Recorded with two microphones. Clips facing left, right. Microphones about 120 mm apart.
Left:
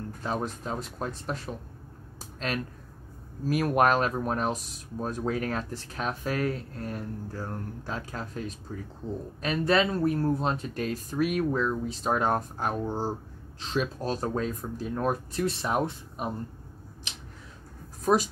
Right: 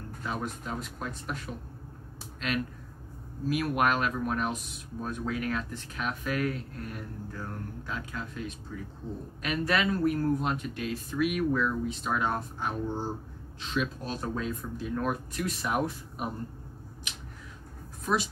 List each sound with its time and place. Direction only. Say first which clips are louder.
0.2 s speech: left 3 dB; 30° left (ahead or behind)
18.0 s speech: left 5 dB; 40° left (ahead or behind)